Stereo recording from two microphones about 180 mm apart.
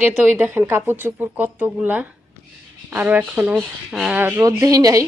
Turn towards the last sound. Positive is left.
turn(degrees=-20)  # may be behind; listen again after turning